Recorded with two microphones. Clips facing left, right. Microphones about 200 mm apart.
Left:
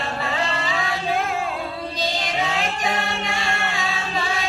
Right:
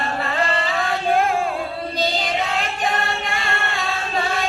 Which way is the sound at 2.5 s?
55° right (ahead or behind).